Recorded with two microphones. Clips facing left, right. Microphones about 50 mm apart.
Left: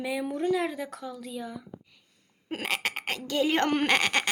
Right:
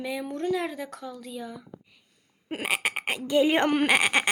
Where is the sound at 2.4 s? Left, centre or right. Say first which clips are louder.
Right 2 dB; centre.